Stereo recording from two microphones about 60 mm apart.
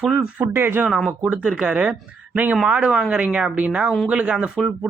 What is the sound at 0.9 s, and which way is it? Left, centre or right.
Speech, centre.